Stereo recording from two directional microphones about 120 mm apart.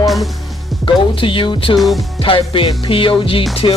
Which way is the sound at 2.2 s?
45° left (ahead or behind).